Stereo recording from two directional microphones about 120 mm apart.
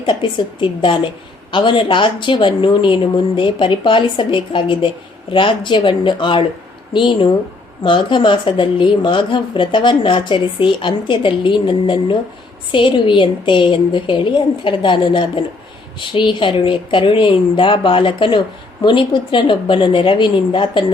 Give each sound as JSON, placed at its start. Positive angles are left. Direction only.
{"t": 0.0, "sound": "speech", "side_deg": 40}